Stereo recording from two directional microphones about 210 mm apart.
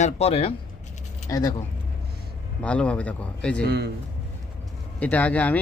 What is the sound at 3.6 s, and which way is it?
Speech, 55° right (ahead or behind).